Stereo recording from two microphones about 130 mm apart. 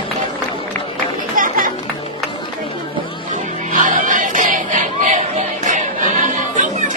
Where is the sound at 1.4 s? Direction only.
90° right.